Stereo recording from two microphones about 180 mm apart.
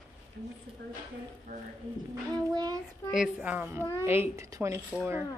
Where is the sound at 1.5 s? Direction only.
45° right (ahead or behind).